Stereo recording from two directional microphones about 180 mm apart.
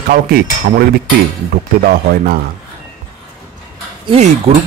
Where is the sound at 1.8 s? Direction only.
55° right (ahead or behind).